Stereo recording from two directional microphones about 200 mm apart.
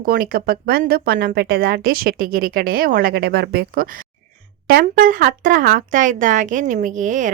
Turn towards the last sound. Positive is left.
turn(degrees=-40)  # may be behind; listen again after turning